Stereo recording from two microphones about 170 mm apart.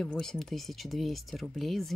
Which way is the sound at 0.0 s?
5° left (ahead or behind).